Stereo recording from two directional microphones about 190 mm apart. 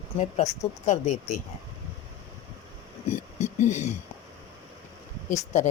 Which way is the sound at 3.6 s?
40° left (ahead or behind).